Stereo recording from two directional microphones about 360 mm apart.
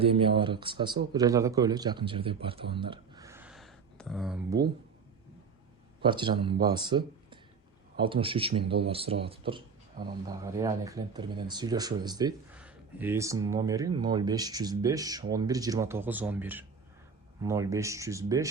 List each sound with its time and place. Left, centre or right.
0.0 s a man's voice: centre
6.0 s speech: centre